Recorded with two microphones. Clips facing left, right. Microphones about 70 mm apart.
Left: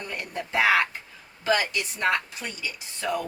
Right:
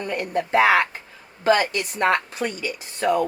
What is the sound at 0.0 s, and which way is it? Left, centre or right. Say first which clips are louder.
Speech: right 9 dB; right.